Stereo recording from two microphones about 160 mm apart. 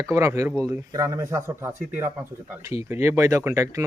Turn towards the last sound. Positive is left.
turn(degrees=-20)  # may be behind; listen again after turning